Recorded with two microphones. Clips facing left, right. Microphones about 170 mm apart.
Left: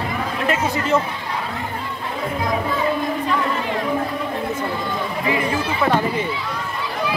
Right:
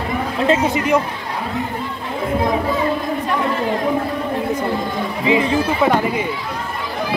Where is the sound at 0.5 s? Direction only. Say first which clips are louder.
Right 4 dB; 15° right (ahead or behind).